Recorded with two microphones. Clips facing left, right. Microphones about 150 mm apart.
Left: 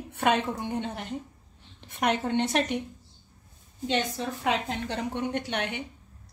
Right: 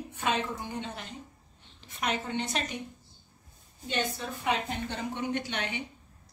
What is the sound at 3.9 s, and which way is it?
Speech, 90° left.